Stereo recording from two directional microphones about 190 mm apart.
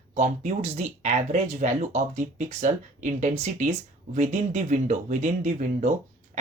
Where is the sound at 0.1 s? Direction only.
35° right (ahead or behind).